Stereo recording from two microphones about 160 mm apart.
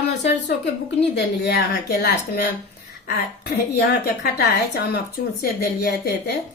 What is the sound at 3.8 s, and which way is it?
A woman's voice, 90° left.